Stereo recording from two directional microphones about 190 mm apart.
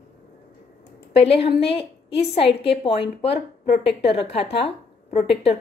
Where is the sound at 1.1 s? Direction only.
30° left (ahead or behind).